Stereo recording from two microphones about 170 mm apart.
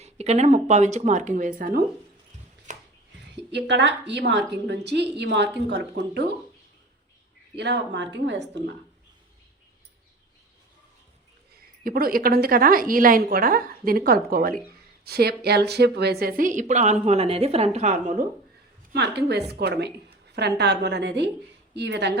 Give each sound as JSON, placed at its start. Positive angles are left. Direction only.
{"t": 0.0, "sound": "a woman's voice", "side_deg": -40}
{"t": 2.7, "sound": "a sound", "side_deg": -45}
{"t": 3.3, "sound": "a woman's voice", "side_deg": -90}
{"t": 7.5, "sound": "a woman's voice", "side_deg": -85}
{"t": 11.8, "sound": "a woman's voice", "side_deg": -60}
{"t": 18.9, "sound": "a woman's voice", "side_deg": -80}